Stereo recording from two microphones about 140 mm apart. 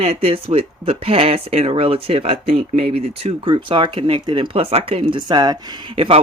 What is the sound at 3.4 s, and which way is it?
Speech, 35° right (ahead or behind).